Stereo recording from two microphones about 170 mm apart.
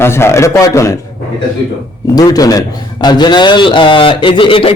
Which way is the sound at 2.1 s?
20° left (ahead or behind).